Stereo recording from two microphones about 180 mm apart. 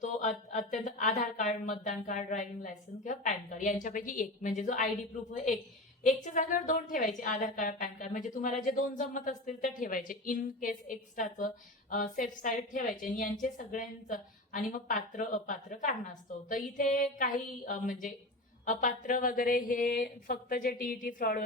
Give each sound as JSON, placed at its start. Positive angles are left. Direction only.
{"t": 0.0, "sound": "a woman's voice", "side_deg": 40}
{"t": 6.1, "sound": "a woman's voice", "side_deg": 45}